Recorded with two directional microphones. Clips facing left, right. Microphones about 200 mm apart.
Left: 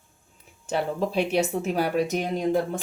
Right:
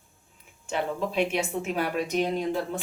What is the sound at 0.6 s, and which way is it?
Speech, 40° left (ahead or behind).